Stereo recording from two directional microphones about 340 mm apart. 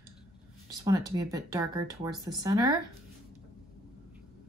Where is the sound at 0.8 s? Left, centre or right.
Centre.